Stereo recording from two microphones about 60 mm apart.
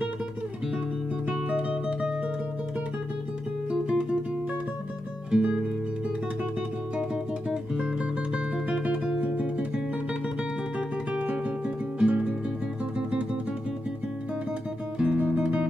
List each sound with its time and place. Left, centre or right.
1.3 s music: centre
3.7 s music: centre
5.3 s music: centre
7.0 s music: centre
11.1 s music: right
15.0 s music: centre